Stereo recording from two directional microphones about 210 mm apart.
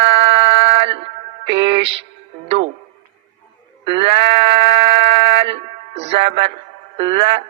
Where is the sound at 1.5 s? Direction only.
25° right (ahead or behind).